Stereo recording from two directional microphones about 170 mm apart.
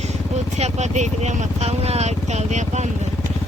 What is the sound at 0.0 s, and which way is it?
Vehicle, 40° right (ahead or behind).